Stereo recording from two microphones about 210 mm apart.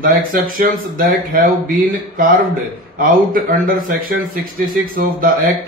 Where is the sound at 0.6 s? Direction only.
40° right (ahead or behind).